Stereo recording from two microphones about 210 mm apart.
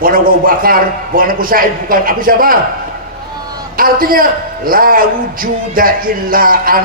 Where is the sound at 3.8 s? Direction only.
45° right (ahead or behind).